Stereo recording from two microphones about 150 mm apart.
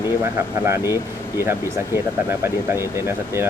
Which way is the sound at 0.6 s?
15° right (ahead or behind).